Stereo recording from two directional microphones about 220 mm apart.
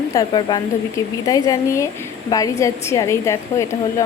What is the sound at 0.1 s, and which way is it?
A woman's voice, 20° left (ahead or behind).